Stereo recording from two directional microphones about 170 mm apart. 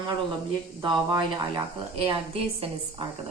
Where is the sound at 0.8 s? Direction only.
25° right (ahead or behind).